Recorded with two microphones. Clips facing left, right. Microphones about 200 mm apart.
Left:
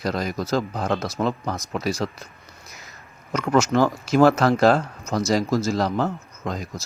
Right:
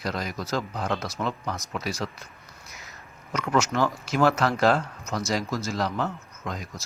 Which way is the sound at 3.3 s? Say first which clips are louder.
Left 5 dB; 40° left (ahead or behind).